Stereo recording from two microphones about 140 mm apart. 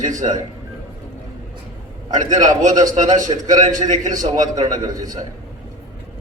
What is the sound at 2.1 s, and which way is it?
A man's voice, 60° right (ahead or behind).